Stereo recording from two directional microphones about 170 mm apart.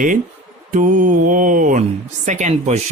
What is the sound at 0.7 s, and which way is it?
Speech, 50° right (ahead or behind).